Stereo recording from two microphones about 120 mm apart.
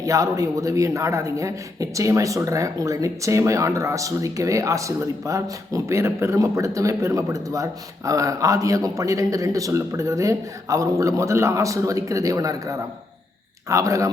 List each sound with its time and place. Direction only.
0.0 s a man's voice: 30° right (ahead or behind)